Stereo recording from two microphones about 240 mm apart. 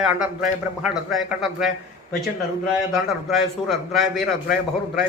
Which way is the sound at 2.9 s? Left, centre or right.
Centre.